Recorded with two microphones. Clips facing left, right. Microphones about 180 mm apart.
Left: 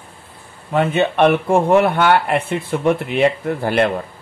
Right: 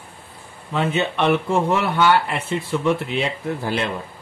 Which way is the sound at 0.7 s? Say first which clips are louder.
Left 5 dB; 55° left (ahead or behind).